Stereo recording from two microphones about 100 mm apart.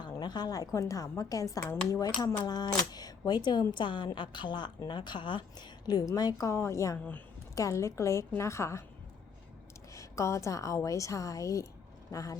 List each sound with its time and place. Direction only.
0.0 s a woman's voice: 45° left (ahead or behind); by 8.8 s 30° left (ahead or behind)
9.9 s a woman's voice: 30° left (ahead or behind)